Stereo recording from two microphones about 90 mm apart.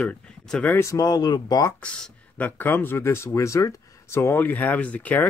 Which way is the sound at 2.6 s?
20° left (ahead or behind).